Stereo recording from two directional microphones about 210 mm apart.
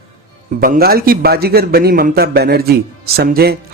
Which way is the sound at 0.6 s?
45° right (ahead or behind).